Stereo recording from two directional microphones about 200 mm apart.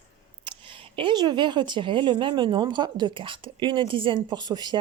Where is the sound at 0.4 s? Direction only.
25° right (ahead or behind).